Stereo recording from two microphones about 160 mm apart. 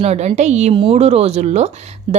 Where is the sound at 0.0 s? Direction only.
45° right (ahead or behind).